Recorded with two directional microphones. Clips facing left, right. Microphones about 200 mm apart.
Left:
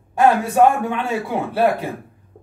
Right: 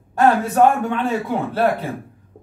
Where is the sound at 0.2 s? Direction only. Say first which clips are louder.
Even; 10° left (ahead or behind).